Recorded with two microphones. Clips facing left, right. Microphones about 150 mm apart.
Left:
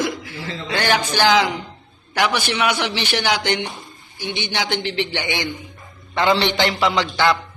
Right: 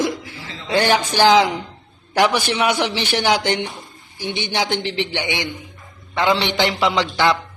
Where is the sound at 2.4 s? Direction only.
35° right (ahead or behind).